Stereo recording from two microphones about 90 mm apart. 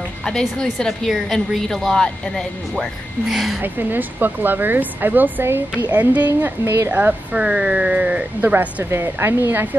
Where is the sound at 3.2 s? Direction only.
5° right (ahead or behind).